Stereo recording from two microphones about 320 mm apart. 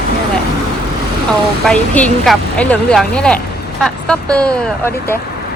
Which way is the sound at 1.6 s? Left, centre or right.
Centre.